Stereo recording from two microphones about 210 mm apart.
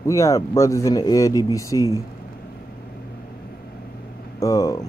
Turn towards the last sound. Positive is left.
turn(degrees=15)  # may be behind; listen again after turning